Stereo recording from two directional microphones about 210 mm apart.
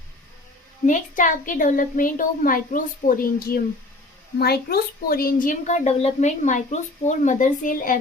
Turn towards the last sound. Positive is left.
turn(degrees=40)  # may be behind; listen again after turning